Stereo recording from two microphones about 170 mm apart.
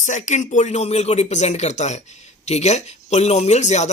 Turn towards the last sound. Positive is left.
turn(degrees=45)  # may be behind; listen again after turning